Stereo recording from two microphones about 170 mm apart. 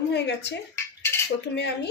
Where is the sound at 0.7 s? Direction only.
15° left (ahead or behind).